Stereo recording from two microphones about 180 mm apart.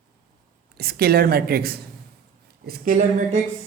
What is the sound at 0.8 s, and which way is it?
A woman's voice, 60° right (ahead or behind).